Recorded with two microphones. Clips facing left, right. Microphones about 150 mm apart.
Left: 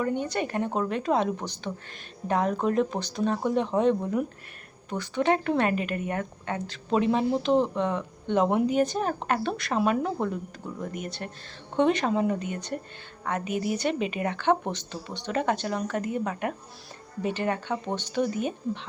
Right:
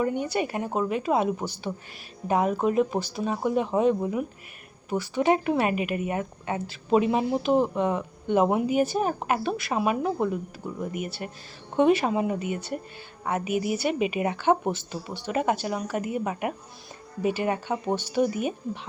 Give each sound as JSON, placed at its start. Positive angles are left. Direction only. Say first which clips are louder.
{"t": 0.0, "sound": "speech", "louder": "right 2 dB", "side_deg": -10}